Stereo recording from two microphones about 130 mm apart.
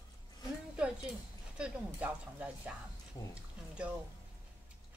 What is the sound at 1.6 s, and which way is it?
Speech, 10° right (ahead or behind).